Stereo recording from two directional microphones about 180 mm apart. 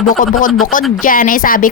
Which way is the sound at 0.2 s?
45° left (ahead or behind).